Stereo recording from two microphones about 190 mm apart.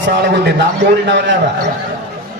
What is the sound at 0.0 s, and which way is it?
A man's voice, 60° right (ahead or behind).